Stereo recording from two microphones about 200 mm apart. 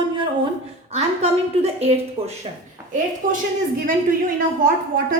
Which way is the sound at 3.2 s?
45° right (ahead or behind).